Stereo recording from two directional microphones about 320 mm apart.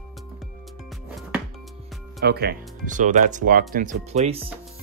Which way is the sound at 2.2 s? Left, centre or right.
Right.